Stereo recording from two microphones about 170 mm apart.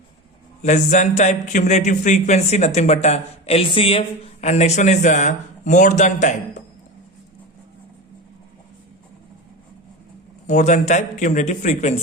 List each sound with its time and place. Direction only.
0.6 s a man's voice: 45° left (ahead or behind)
10.4 s a man's voice: 45° left (ahead or behind)